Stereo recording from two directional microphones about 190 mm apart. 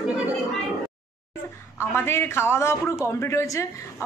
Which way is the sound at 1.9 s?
10° left (ahead or behind).